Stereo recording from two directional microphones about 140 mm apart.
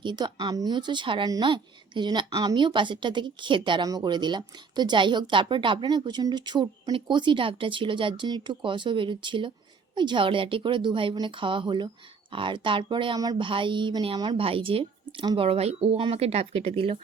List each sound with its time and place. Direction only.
0.0 s speech: 30° right (ahead or behind)